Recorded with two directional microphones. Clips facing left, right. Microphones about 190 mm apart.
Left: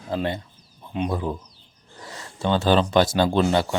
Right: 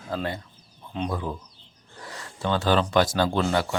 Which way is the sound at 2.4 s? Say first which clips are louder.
Left 3 dB; 25° left (ahead or behind).